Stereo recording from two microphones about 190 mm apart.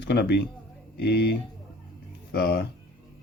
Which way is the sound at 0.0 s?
60° left (ahead or behind).